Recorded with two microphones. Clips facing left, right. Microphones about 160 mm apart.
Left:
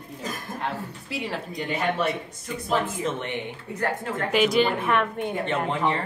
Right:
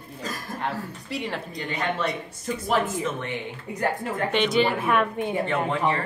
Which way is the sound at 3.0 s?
20° left (ahead or behind).